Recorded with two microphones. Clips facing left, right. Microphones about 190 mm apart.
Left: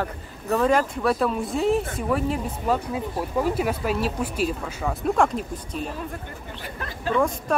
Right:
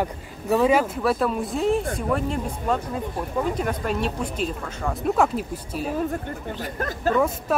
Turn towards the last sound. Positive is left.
turn(degrees=-5)  # may be behind; listen again after turning